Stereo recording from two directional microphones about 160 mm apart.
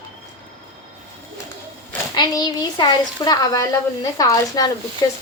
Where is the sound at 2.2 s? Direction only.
25° left (ahead or behind).